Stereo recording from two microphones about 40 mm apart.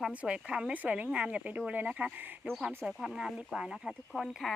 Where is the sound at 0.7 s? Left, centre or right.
Right.